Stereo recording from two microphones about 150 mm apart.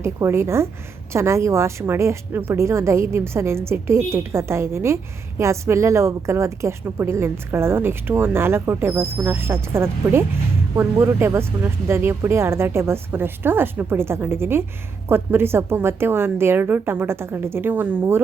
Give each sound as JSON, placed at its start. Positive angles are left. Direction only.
{"t": 0.0, "sound": "a woman's voice", "side_deg": -15}